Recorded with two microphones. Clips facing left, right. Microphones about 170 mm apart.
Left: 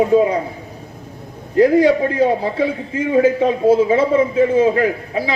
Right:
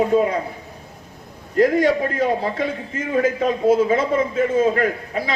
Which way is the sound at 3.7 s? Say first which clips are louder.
Left 3 dB; 30° left (ahead or behind).